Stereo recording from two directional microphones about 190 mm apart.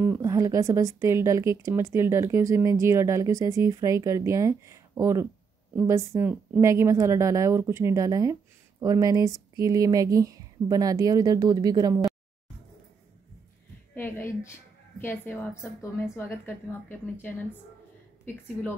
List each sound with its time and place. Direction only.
0.0 s speech: 15° right (ahead or behind)
13.9 s a woman's voice: 10° left (ahead or behind)